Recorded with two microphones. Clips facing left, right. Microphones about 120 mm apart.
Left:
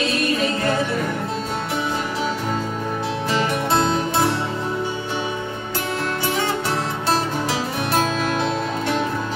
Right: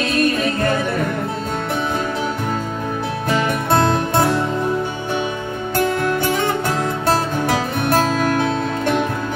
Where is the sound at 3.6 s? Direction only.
55° right (ahead or behind).